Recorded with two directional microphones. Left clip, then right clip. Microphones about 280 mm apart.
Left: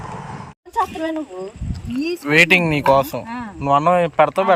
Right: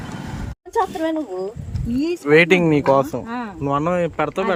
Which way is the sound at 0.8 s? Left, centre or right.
Right.